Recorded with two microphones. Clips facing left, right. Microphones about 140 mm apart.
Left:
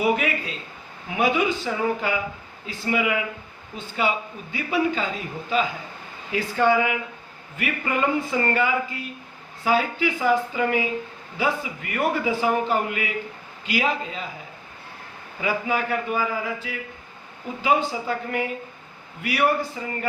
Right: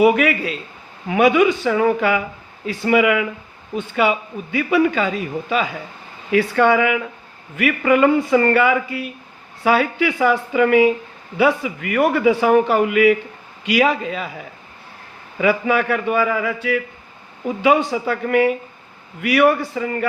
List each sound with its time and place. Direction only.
0.0 s a man's voice: 75° right (ahead or behind)
15.4 s a man's voice: 75° right (ahead or behind)